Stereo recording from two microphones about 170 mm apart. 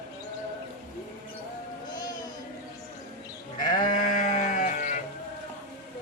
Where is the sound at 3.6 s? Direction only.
25° left (ahead or behind).